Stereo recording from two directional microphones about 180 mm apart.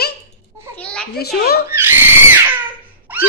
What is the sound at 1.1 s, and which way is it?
Speech, 60° left (ahead or behind).